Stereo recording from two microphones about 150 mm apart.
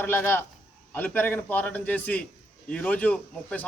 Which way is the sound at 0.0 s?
15° left (ahead or behind).